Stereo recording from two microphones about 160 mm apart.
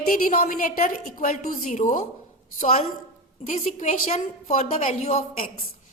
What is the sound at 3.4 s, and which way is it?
A woman's voice, 50° left (ahead or behind).